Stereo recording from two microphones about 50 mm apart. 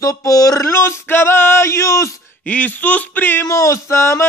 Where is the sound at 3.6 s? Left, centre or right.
Left.